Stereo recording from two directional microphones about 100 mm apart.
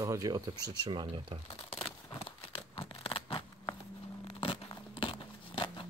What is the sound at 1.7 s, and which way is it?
Crumpling, 65° left (ahead or behind).